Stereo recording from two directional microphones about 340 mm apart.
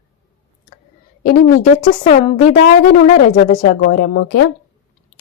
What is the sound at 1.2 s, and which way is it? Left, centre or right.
Speech, left.